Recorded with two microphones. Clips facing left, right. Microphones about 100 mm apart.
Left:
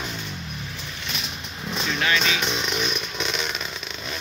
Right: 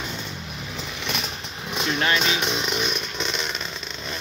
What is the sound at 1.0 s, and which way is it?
Vehicle, centre (ahead or behind).